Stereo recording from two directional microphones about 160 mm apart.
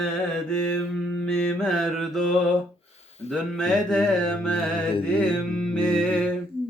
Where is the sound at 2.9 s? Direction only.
40° left (ahead or behind).